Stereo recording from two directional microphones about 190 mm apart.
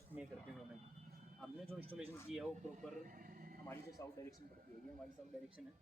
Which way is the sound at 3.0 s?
45° right (ahead or behind).